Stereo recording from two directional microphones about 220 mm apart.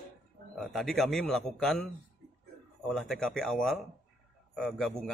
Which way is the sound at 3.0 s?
Centre (ahead or behind).